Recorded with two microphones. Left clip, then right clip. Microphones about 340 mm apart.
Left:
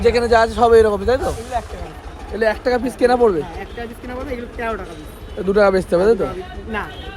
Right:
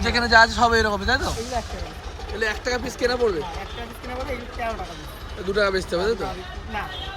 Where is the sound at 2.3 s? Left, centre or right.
Centre.